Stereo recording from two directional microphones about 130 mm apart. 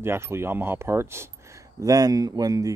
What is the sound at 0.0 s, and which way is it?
Speech, 20° right (ahead or behind).